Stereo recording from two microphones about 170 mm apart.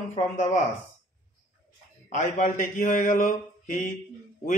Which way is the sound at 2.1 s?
45° left (ahead or behind).